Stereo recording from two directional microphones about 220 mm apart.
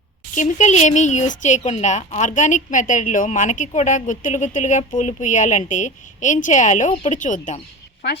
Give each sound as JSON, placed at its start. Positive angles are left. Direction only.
{"t": 0.3, "sound": "speech", "side_deg": 35}